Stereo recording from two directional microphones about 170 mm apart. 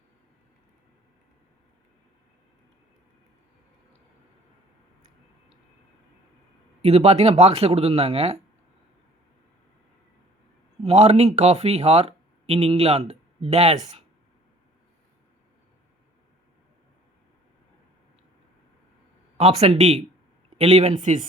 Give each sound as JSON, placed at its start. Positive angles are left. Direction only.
{"t": 6.8, "sound": "speech", "side_deg": -40}
{"t": 10.8, "sound": "speech", "side_deg": -40}
{"t": 19.4, "sound": "speech", "side_deg": -40}